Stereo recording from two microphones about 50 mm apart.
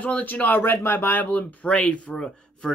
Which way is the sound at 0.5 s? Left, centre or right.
Left.